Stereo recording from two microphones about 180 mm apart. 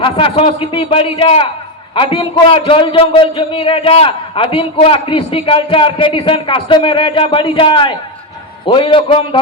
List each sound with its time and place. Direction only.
0.0 s a man's voice: 30° left (ahead or behind)